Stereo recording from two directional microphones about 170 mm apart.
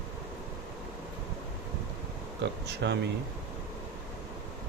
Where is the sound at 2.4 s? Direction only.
90° right.